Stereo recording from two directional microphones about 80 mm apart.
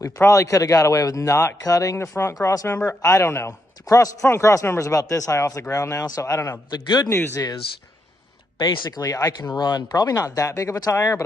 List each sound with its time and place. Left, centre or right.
0.0 s a man's voice: left
2.0 s speech: left
2.4 s a man's voice: left
6.7 s speech: left
8.7 s a man's voice: left